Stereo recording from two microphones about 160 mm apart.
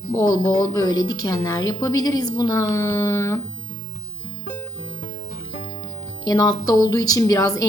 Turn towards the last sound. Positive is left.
turn(degrees=20)  # may be behind; listen again after turning